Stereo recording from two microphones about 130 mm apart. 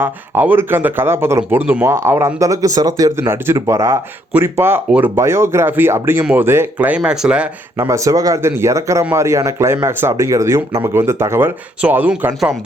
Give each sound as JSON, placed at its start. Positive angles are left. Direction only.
{"t": 0.0, "sound": "speech", "side_deg": -15}
{"t": 7.8, "sound": "speech", "side_deg": -25}